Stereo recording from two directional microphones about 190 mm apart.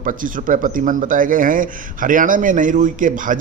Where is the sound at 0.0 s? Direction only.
45° right (ahead or behind).